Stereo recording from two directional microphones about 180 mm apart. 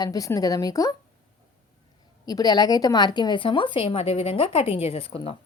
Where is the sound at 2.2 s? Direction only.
20° left (ahead or behind).